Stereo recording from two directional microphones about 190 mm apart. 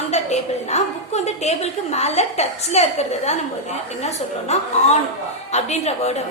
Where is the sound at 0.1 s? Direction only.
35° left (ahead or behind).